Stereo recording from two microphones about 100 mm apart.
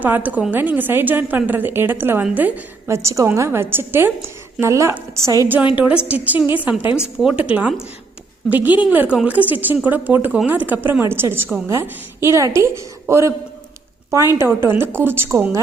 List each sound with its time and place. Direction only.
0.0 s a woman's voice: 15° right (ahead or behind); by 5.5 s 35° right (ahead or behind)
5.7 s a woman's voice: 10° right (ahead or behind)